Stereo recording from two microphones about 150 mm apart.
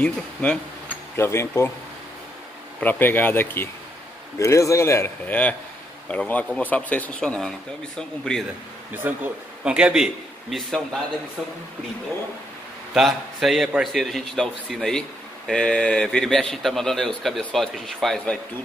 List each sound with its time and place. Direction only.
0.0 s speech: 5° left (ahead or behind)
1.1 s speech: 15° left (ahead or behind)
2.8 s a man's voice: 10° left (ahead or behind)
9.0 s a man's voice: 10° right (ahead or behind)
12.9 s a man's voice: centre (ahead or behind)